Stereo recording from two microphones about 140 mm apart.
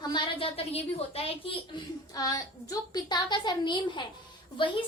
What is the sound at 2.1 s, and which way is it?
A woman's voice, 25° left (ahead or behind).